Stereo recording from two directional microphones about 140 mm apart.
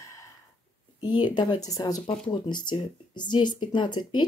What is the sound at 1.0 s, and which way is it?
Speech, 30° left (ahead or behind).